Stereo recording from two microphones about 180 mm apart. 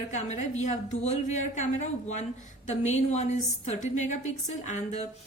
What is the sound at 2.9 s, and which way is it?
A woman's voice, 40° left (ahead or behind).